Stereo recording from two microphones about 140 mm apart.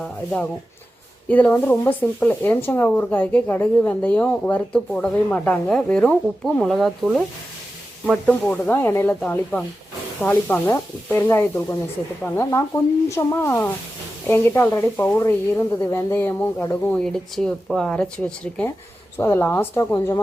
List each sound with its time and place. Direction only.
0.0 s speech: 10° left (ahead or behind)
8.3 s speech: 10° left (ahead or behind)